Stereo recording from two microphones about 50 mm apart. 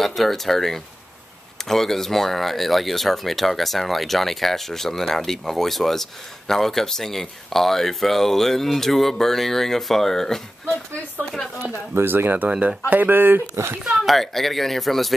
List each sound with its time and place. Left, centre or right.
0.0 s speech: centre
11.9 s speech: right
12.4 s speech: right
14.0 s speech: centre